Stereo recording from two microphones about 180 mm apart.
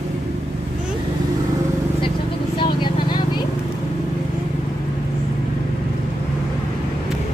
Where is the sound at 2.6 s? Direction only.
25° left (ahead or behind).